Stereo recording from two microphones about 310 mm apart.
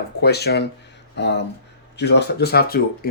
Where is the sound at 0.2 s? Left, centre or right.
Left.